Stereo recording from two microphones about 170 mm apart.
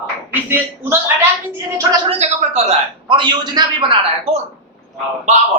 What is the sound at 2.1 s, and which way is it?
Speech, 40° right (ahead or behind).